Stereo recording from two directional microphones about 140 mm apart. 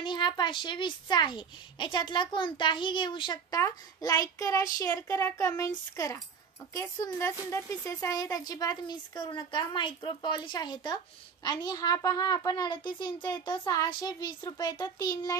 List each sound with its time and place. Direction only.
0.0 s a child's voice: 35° left (ahead or behind)
3.6 s a woman's voice: 25° left (ahead or behind)
6.7 s a woman's voice: 20° left (ahead or behind)